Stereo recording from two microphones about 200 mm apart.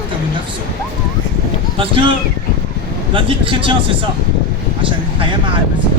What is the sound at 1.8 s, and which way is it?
A man's voice, 25° right (ahead or behind).